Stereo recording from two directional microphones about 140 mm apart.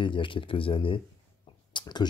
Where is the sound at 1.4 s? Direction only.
35° left (ahead or behind).